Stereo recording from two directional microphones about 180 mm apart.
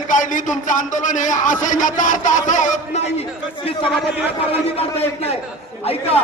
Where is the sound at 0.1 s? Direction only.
45° left (ahead or behind).